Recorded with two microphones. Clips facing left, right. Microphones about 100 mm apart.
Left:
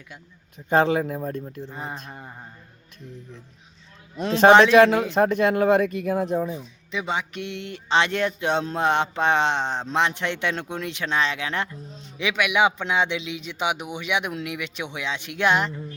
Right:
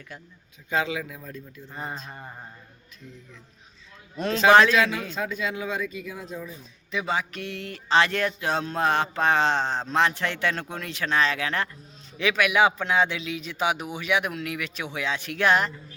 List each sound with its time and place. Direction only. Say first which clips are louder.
0.7 s a man's voice: left 8 dB; 50° left (ahead or behind)
1.7 s mantra: right 2 dB; 15° left (ahead or behind)
2.0 s mantra: left 1 dB; 5° left (ahead or behind)
4.7 s speech: left 9 dB; 55° left (ahead or behind)
6.9 s speech: even; 25° left (ahead or behind)